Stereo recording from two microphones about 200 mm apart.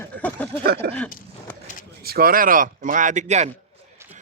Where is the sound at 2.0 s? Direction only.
50° right (ahead or behind).